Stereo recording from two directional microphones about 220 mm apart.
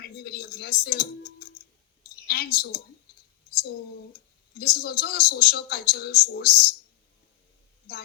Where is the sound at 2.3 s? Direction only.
45° left (ahead or behind).